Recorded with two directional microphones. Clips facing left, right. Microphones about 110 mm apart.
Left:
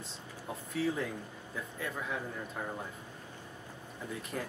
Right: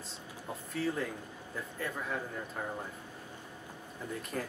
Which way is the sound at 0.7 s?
Centre (ahead or behind).